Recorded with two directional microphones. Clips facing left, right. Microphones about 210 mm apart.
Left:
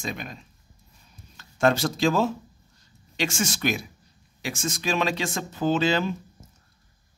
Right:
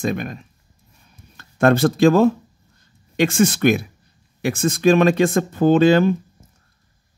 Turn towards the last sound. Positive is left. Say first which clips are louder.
# right 10 dB
turn(degrees=-55)  # may be behind; listen again after turning